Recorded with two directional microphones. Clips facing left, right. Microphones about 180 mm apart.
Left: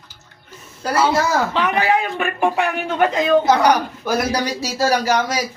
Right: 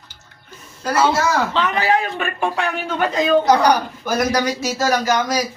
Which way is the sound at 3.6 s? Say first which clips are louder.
Even; 30° left (ahead or behind).